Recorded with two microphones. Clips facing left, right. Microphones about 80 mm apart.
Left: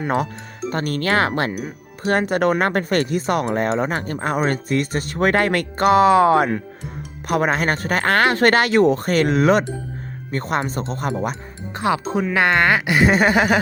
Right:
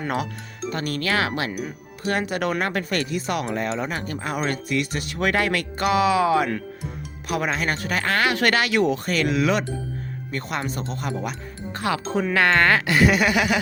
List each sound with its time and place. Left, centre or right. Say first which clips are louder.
0.7 s speech: left 4 dB; left
11.7 s speech: left 4 dB; left
13.1 s speech: left 4 dB; left